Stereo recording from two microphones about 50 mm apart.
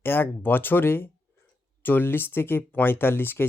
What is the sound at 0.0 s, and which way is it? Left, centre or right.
Speech, left.